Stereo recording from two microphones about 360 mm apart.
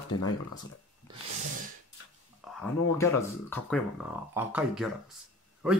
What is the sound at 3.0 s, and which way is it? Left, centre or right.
Speech, centre.